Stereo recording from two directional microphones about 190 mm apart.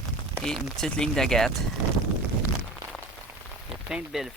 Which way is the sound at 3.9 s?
5° right (ahead or behind).